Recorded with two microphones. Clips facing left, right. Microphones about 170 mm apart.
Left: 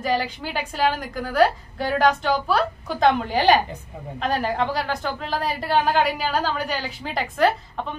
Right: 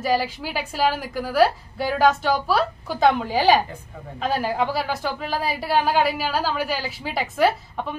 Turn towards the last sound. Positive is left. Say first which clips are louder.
# even
turn(degrees=-5)  # may be behind; listen again after turning